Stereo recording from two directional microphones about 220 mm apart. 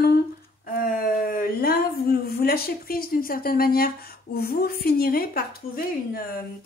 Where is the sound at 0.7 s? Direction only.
40° left (ahead or behind).